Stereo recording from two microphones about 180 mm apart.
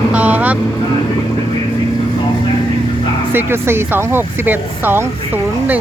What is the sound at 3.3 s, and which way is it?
Speech, 10° right (ahead or behind).